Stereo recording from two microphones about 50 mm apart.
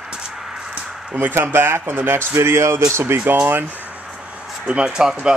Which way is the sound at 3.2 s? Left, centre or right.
Right.